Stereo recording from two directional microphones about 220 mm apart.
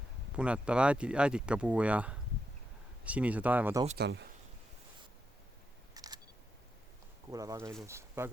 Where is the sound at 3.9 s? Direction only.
50° right (ahead or behind).